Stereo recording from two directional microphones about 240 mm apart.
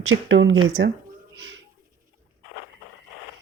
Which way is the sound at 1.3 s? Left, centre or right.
Right.